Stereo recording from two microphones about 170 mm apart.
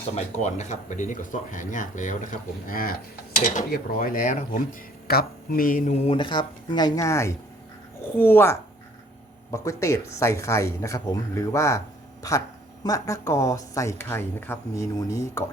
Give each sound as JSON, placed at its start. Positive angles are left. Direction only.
{"t": 0.1, "sound": "speech", "side_deg": 40}
{"t": 5.0, "sound": "speech", "side_deg": 65}